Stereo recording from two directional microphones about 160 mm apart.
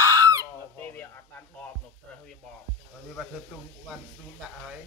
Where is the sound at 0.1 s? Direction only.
20° right (ahead or behind).